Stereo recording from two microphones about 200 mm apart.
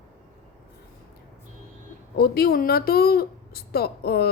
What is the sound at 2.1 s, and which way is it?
A woman's voice, 50° left (ahead or behind).